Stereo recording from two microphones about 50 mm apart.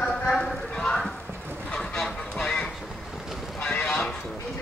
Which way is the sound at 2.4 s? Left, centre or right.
Centre.